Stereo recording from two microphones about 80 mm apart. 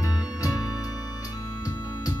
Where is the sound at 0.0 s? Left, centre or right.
Left.